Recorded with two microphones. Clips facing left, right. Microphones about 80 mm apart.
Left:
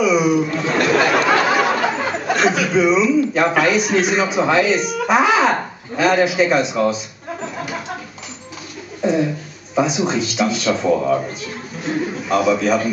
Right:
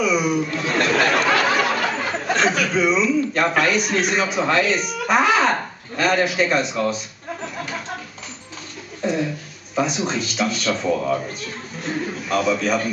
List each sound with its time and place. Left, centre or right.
0.0 s a man's voice: centre
7.4 s a sound: centre
9.0 s a man's voice: centre
10.9 s a man's voice: centre